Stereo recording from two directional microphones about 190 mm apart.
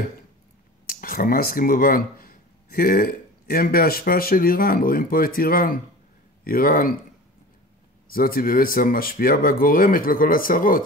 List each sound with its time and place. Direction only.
0.8 s speech: 50° left (ahead or behind)
8.1 s speech: 50° left (ahead or behind)